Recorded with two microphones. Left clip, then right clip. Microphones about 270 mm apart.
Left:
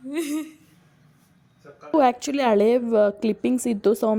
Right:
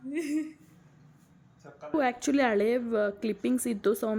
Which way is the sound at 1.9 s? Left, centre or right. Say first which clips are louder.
Left 8 dB; centre.